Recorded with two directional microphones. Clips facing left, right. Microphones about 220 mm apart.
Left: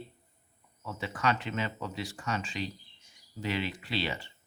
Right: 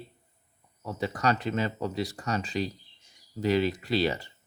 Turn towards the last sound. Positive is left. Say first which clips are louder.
# right 7 dB
turn(degrees=-40)  # may be behind; listen again after turning